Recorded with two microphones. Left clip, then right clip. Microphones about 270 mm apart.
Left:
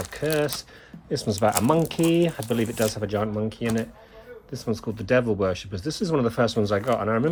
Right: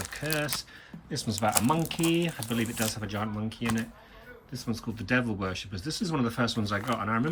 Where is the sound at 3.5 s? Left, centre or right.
Centre.